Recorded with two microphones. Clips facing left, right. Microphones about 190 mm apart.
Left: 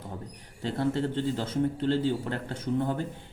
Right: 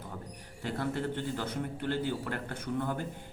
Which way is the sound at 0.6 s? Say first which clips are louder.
Left 5 dB; 25° left (ahead or behind).